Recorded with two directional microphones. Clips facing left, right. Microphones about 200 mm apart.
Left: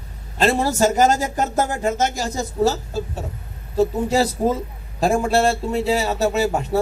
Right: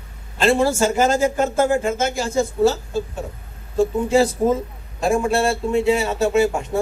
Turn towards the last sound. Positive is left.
turn(degrees=35)  # may be behind; listen again after turning